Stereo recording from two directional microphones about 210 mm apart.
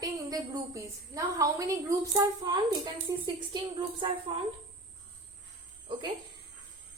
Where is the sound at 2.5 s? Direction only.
20° right (ahead or behind).